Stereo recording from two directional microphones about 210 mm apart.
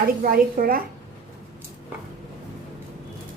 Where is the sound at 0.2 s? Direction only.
40° right (ahead or behind).